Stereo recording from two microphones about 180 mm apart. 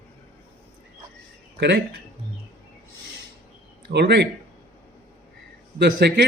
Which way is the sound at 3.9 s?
65° right (ahead or behind).